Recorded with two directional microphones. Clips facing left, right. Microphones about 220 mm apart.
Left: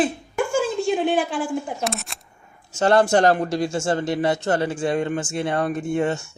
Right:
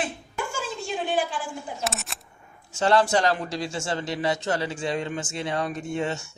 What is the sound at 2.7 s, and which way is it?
Speech, 50° left (ahead or behind).